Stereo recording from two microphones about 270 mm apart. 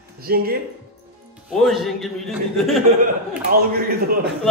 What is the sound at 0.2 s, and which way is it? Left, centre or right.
Speech, right.